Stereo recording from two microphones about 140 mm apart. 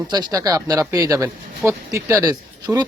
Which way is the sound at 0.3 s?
25° right (ahead or behind).